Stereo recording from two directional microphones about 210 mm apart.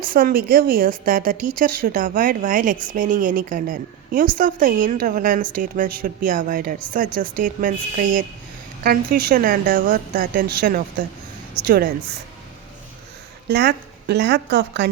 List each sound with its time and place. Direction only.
0.0 s a woman's voice: 45° right (ahead or behind)
13.5 s a woman's voice: 50° right (ahead or behind)